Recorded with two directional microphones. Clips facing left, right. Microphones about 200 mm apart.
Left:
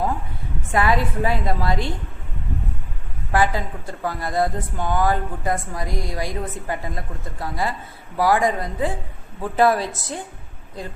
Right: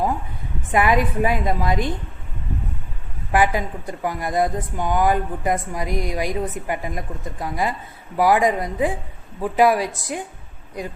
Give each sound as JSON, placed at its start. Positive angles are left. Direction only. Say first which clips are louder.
{"t": 0.7, "sound": "a woman's voice", "louder": "right 2 dB", "side_deg": -15}
{"t": 3.3, "sound": "a woman's voice", "louder": "right 2 dB", "side_deg": -15}